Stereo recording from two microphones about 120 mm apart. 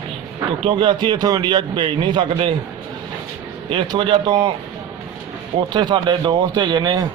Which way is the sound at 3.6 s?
45° right (ahead or behind).